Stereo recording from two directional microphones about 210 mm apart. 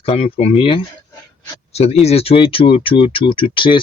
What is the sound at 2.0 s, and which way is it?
Speech, 30° left (ahead or behind).